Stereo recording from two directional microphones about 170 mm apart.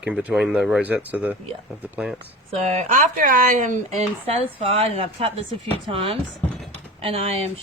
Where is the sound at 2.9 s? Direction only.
50° right (ahead or behind).